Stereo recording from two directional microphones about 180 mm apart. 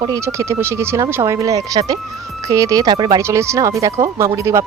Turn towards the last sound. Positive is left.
turn(degrees=-15)  # may be behind; listen again after turning